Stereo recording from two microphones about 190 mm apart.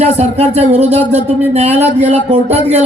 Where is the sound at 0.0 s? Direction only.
35° right (ahead or behind).